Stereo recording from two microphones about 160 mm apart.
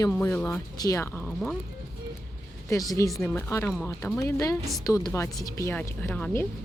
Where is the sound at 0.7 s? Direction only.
20° left (ahead or behind).